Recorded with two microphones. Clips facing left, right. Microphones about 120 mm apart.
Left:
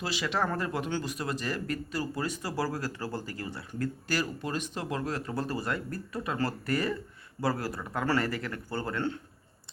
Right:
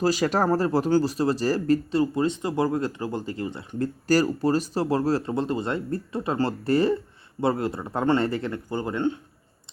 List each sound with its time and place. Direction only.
0.0 s speech: 40° right (ahead or behind); by 3.8 s 25° right (ahead or behind)
4.0 s speech: 40° right (ahead or behind); by 9.1 s 20° right (ahead or behind)